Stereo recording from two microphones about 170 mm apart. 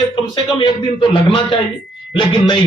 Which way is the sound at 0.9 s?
30° left (ahead or behind).